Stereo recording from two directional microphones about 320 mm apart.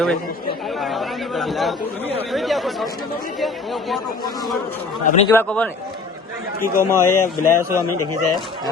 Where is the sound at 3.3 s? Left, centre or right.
Centre.